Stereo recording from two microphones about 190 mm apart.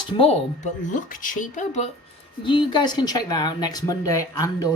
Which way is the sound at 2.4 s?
25° left (ahead or behind).